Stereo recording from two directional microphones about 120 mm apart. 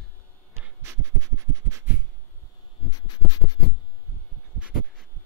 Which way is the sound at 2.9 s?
30° left (ahead or behind).